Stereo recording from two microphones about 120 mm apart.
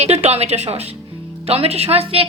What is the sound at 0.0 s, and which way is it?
A woman's voice, 60° right (ahead or behind).